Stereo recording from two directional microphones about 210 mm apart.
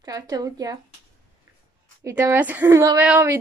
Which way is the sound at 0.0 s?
15° right (ahead or behind).